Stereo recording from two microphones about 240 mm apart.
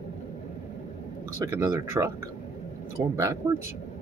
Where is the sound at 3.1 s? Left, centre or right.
Centre.